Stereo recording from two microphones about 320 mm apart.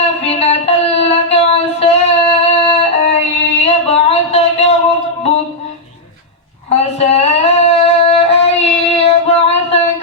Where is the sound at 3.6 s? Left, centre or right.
Centre.